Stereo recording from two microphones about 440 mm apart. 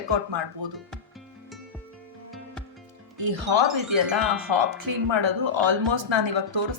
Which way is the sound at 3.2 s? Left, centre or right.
Right.